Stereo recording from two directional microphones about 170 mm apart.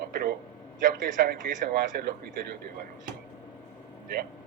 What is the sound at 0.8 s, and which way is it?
Speech, 55° right (ahead or behind).